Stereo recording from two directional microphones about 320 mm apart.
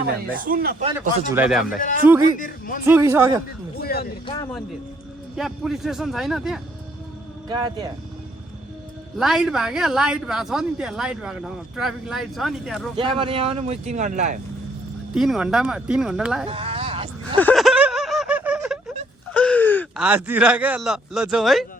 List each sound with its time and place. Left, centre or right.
0.3 s speech: right
1.3 s speech: centre
2.2 s speech: left
2.8 s speech: centre
3.8 s speech: left
5.4 s speech: centre
7.4 s speech: centre
9.1 s speech: centre
13.0 s speech: centre
15.1 s speech: centre
16.5 s a sound: centre
17.4 s a sound: centre
19.3 s speech: centre